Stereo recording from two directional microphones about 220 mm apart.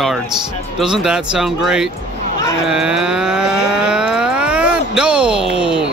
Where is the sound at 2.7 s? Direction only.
5° right (ahead or behind).